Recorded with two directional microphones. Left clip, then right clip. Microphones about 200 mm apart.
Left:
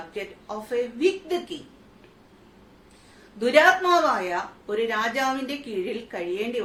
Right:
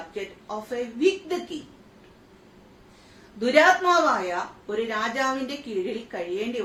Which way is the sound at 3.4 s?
15° left (ahead or behind).